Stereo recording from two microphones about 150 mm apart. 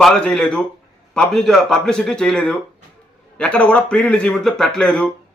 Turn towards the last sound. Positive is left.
turn(degrees=5)  # may be behind; listen again after turning